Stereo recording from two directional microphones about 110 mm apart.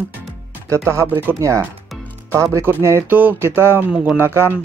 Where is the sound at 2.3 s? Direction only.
25° right (ahead or behind).